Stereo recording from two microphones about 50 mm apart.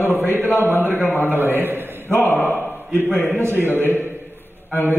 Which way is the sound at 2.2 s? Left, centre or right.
Left.